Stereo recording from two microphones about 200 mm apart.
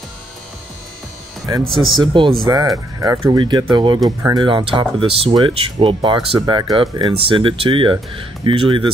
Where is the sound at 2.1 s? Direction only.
25° right (ahead or behind).